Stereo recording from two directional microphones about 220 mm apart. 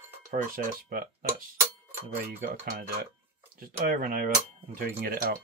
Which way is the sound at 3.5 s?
40° right (ahead or behind).